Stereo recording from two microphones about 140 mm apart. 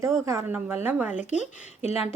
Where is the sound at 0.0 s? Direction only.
20° right (ahead or behind).